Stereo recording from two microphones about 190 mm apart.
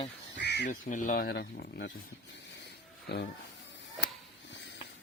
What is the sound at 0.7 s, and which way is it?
Speech, 40° left (ahead or behind).